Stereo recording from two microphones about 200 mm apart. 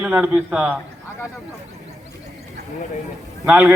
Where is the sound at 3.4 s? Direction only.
5° right (ahead or behind).